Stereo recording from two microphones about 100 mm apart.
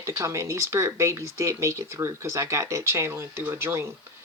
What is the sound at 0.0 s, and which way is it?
Speech, 30° right (ahead or behind).